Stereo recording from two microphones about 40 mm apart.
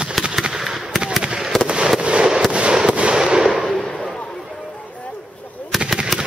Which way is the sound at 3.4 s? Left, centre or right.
Centre.